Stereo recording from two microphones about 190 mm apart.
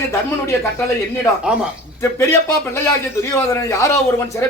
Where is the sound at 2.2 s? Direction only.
15° left (ahead or behind).